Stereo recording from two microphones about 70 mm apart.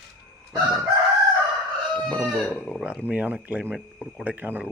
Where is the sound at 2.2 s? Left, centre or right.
Centre.